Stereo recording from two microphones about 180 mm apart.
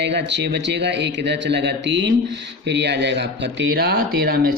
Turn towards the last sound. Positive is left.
turn(degrees=-55)  # may be behind; listen again after turning